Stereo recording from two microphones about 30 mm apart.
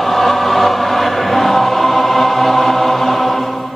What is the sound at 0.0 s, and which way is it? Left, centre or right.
Choir, centre.